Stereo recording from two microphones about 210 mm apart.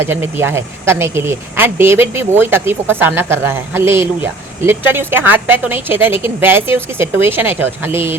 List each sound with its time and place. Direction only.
0.0 s speech: 10° right (ahead or behind)